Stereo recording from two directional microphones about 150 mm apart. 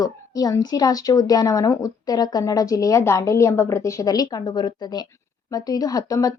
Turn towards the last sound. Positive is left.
turn(degrees=25)  # may be behind; listen again after turning